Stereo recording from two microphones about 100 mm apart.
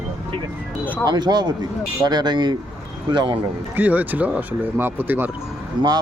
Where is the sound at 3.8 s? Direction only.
15° right (ahead or behind).